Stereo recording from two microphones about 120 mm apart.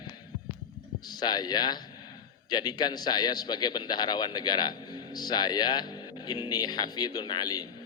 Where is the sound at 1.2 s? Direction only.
35° left (ahead or behind).